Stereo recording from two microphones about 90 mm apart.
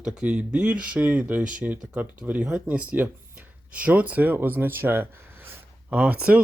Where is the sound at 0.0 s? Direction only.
15° right (ahead or behind).